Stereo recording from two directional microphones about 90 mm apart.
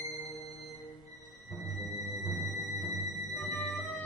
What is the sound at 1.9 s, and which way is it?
Music, 40° right (ahead or behind).